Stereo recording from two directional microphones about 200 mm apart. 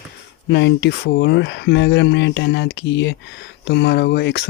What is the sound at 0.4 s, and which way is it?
Speech, 60° left (ahead or behind).